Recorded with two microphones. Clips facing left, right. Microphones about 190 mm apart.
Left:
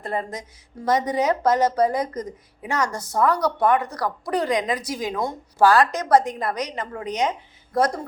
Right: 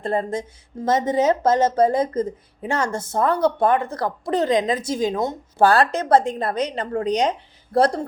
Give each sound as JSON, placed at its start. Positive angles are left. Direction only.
{"t": 0.0, "sound": "speech", "side_deg": -30}